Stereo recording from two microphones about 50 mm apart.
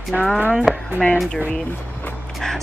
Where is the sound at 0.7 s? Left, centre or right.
Centre.